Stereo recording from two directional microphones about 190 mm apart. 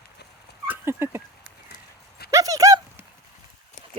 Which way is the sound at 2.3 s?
20° right (ahead or behind).